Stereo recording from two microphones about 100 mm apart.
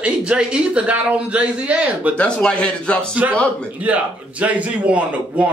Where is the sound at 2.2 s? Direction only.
10° left (ahead or behind).